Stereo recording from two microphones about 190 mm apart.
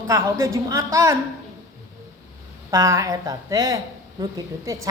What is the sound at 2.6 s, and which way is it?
A man's voice, 15° right (ahead or behind).